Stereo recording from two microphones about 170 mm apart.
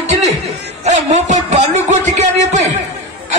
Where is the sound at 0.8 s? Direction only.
45° right (ahead or behind).